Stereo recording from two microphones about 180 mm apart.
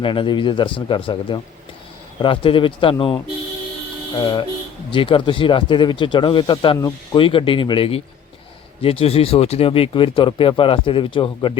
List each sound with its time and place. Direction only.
0.0 s speech: 30° left (ahead or behind)